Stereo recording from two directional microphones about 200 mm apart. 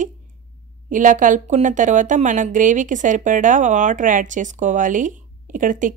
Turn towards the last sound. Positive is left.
turn(degrees=-40)  # may be behind; listen again after turning